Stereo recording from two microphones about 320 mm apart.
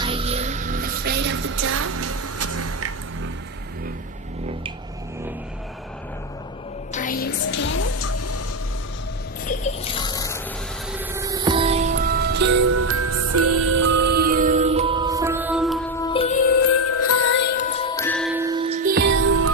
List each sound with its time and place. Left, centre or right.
0.0 s music: centre; by 2.9 s right
6.9 s music: left
9.5 s a sound: centre
10.9 s music: centre
16.8 s music: left
17.6 s music: centre; by 19.0 s right
19.2 s music: right